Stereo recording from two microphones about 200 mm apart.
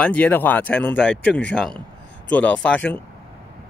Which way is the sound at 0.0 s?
5° left (ahead or behind).